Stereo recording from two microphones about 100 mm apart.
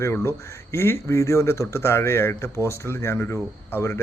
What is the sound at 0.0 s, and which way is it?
Speech, 25° left (ahead or behind).